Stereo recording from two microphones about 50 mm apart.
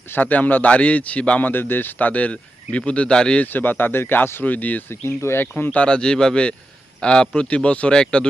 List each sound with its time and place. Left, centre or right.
0.1 s speech: left
1.5 s speech: left; by 3.4 s centre
3.4 s speech: left
4.4 s speech: left
4.9 s speech: left
5.7 s speech: left